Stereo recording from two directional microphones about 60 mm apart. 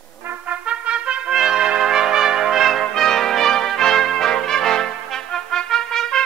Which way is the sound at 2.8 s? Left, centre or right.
Centre.